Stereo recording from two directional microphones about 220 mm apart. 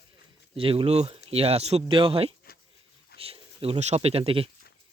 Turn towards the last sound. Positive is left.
turn(degrees=-25)  # may be behind; listen again after turning